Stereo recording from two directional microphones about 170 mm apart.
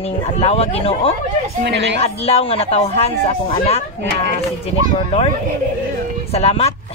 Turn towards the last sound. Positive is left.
turn(degrees=35)  # may be behind; listen again after turning